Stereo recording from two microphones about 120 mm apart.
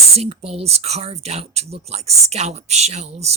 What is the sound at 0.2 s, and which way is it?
Speech, 60° right (ahead or behind).